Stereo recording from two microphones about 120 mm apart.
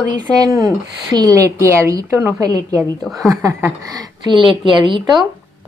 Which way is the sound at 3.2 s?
30° right (ahead or behind).